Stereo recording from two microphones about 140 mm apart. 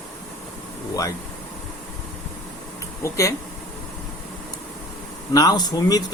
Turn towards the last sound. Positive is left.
turn(degrees=25)  # may be behind; listen again after turning